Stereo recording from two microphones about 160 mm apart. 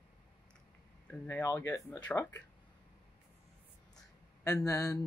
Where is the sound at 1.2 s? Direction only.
15° left (ahead or behind).